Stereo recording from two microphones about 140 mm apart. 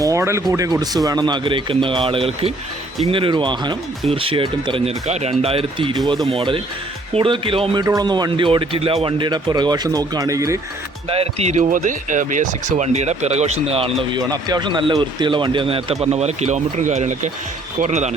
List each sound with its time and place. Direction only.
0.0 s speech: 20° right (ahead or behind); by 4.9 s 40° right (ahead or behind)
5.0 s speech: 50° right (ahead or behind); by 10.6 s 25° right (ahead or behind)
11.1 s speech: 45° right (ahead or behind)
14.1 s speech: 30° right (ahead or behind); by 18.1 s 55° right (ahead or behind)